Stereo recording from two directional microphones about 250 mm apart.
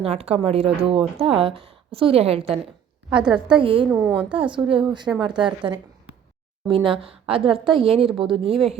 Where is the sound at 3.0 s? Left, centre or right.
Centre.